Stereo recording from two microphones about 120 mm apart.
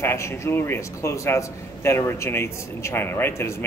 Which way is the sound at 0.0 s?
20° left (ahead or behind).